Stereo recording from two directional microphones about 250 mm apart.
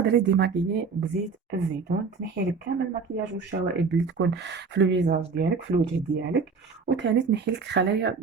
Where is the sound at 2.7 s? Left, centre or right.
Right.